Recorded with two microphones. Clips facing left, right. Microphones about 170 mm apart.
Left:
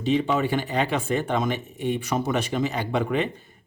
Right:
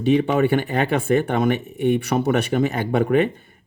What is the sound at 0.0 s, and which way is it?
Speech, 55° right (ahead or behind).